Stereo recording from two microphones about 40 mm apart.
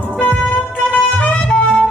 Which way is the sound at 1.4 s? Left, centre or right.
Centre.